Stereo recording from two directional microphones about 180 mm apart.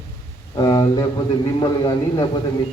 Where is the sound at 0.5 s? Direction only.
25° left (ahead or behind).